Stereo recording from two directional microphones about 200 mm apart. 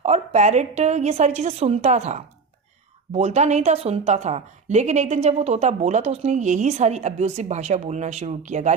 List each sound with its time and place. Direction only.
0.0 s a woman's voice: 35° right (ahead or behind)